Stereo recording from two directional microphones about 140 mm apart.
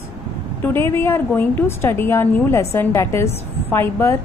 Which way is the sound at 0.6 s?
15° left (ahead or behind).